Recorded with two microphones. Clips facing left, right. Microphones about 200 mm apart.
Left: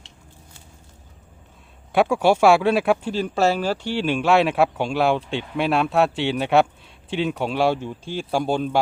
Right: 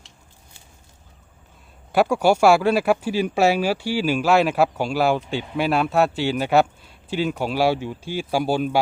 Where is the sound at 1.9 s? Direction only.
Centre (ahead or behind).